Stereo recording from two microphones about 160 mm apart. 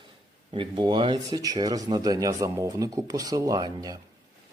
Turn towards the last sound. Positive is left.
turn(degrees=-25)  # may be behind; listen again after turning